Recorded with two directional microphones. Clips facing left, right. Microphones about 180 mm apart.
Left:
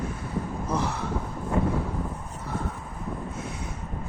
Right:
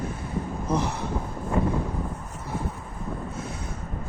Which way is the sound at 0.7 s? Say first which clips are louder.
Right 2 dB; 20° right (ahead or behind).